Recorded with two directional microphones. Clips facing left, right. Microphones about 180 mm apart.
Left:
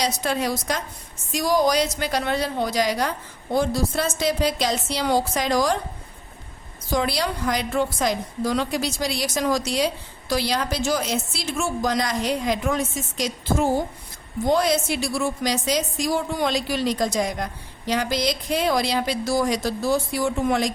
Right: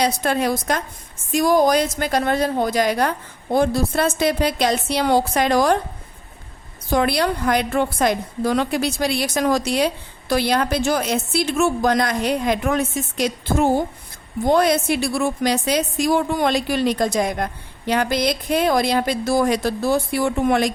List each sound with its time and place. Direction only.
0.0 s a woman's voice: 55° right (ahead or behind)
6.9 s a woman's voice: 55° right (ahead or behind)